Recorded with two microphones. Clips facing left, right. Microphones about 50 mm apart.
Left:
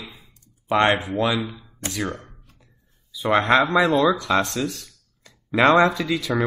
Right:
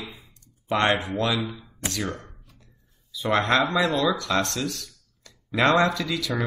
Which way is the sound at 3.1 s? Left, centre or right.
Centre.